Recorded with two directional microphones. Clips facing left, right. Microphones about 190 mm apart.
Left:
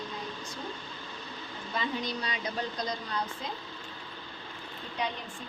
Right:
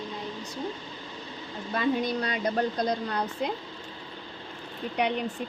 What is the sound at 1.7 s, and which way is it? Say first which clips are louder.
A woman's voice: right 7 dB; 55° right (ahead or behind).